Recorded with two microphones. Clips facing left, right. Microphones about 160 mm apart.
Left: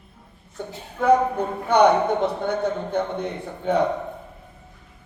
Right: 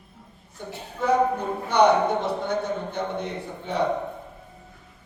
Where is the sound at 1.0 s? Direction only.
55° left (ahead or behind).